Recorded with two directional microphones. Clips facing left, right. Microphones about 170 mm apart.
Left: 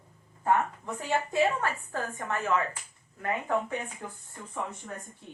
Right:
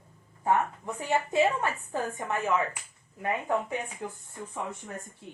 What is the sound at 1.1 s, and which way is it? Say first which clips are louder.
A woman's voice: right 1 dB; 15° right (ahead or behind).